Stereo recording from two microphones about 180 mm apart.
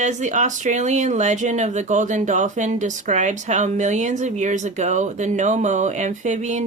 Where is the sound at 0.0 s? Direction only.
40° right (ahead or behind).